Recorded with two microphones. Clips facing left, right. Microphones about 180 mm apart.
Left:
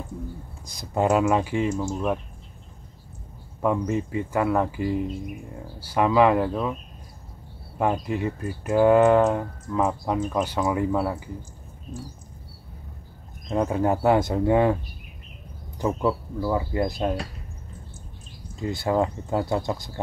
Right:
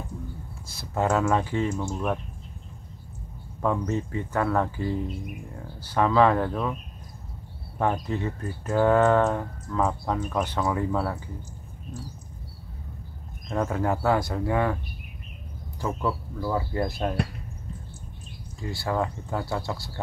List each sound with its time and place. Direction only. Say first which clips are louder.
0.7 s speech: left 3 dB; 15° left (ahead or behind)
3.6 s speech: left 2 dB; 15° left (ahead or behind)
7.8 s speech: left 2 dB; 10° left (ahead or behind)
13.5 s speech: left 3 dB; 20° left (ahead or behind)
15.8 s speech: left 4 dB; 20° left (ahead or behind)
18.6 s speech: left 4 dB; 20° left (ahead or behind)